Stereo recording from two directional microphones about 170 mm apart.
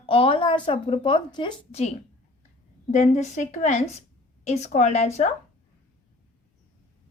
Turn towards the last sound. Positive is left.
turn(degrees=40)  # may be behind; listen again after turning